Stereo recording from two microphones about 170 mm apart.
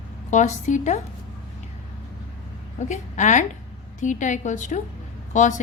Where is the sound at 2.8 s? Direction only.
45° left (ahead or behind).